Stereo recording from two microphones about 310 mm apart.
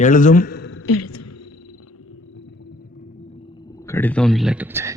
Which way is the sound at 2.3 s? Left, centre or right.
Left.